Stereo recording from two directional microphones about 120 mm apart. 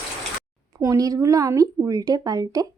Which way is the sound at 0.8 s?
30° right (ahead or behind).